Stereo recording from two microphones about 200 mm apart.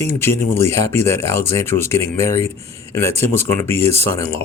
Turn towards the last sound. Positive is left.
turn(degrees=10)  # may be behind; listen again after turning